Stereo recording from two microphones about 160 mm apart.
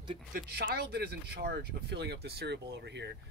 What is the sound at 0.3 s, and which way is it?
Speech, 75° right (ahead or behind).